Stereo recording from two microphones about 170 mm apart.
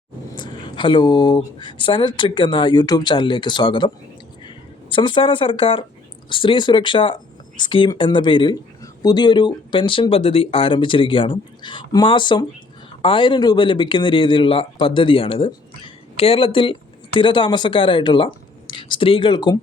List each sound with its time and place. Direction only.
0.3 s speech: 25° left (ahead or behind)